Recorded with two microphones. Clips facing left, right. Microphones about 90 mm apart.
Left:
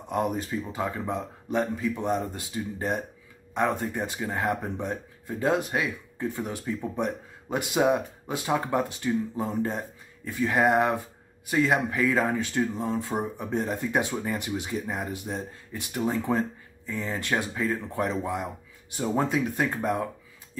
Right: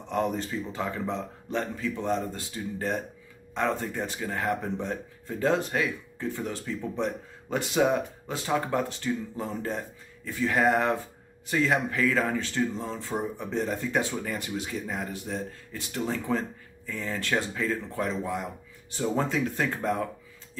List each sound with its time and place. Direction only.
0.1 s speech: 10° left (ahead or behind)